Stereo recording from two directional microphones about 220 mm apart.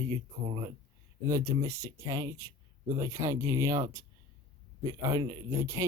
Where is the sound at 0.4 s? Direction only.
20° right (ahead or behind).